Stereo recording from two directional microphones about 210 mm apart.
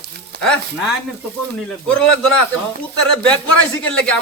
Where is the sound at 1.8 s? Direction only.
5° left (ahead or behind).